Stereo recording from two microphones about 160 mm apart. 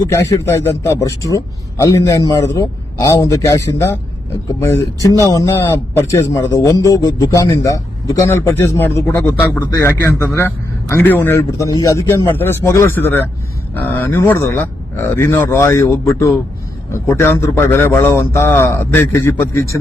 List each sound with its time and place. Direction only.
0.1 s a man's voice: 15° left (ahead or behind)
5.2 s a man's voice: 20° left (ahead or behind)